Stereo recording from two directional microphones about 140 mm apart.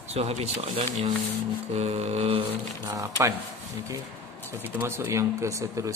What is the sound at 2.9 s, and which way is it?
Speech, 25° right (ahead or behind).